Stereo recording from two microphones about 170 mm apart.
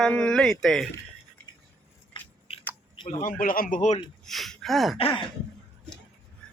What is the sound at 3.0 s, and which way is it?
Speech, 55° left (ahead or behind).